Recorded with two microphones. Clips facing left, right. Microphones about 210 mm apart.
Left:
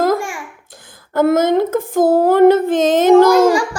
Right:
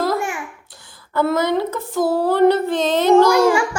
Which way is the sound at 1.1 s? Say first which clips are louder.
Left 5 dB; 45° left (ahead or behind).